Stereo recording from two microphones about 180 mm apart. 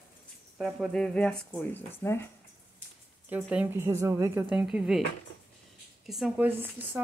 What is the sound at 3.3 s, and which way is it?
Speech, 10° right (ahead or behind).